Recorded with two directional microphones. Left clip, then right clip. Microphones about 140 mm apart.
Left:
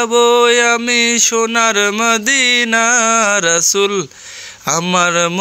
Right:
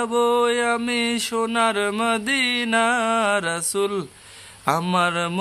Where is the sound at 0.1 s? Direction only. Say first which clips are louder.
Left 9 dB; 35° left (ahead or behind).